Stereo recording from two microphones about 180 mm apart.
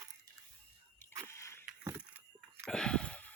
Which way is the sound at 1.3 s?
15° left (ahead or behind).